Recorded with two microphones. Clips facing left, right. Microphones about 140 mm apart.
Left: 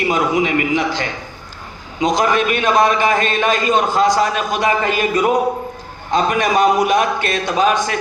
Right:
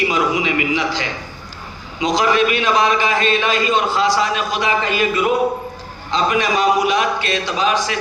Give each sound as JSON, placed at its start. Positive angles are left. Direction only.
{"t": 0.0, "sound": "a man's voice", "side_deg": 50}